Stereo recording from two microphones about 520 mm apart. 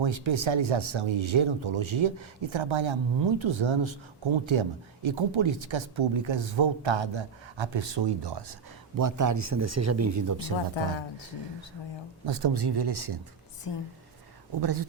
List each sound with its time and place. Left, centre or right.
0.0 s speech: right
9.0 s speech: right
12.2 s speech: right
13.7 s speech: left
14.6 s speech: right